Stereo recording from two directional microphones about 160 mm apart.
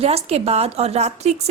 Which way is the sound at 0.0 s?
40° right (ahead or behind).